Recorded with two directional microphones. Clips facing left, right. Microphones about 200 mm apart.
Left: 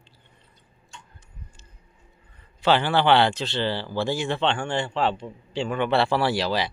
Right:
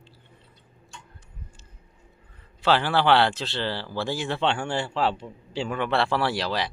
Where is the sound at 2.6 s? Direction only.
Centre (ahead or behind).